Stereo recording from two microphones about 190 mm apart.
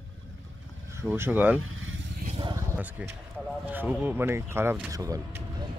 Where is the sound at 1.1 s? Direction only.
10° right (ahead or behind).